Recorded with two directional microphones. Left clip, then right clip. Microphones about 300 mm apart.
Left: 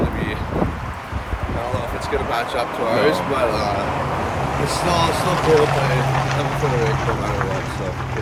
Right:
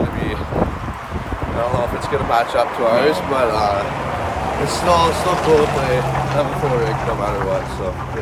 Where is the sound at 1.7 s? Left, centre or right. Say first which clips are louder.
Right 3 dB; centre.